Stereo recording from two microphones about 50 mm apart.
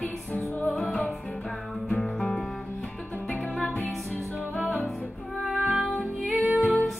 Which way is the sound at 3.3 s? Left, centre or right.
Left.